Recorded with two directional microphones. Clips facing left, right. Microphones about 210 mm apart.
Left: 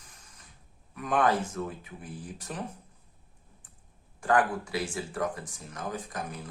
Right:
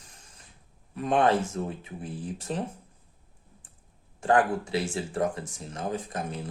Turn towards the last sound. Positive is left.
turn(degrees=-25)  # may be behind; listen again after turning